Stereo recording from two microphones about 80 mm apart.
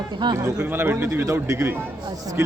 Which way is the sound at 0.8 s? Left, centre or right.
Right.